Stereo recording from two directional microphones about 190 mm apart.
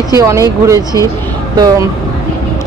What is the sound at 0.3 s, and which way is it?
Speech, 15° right (ahead or behind).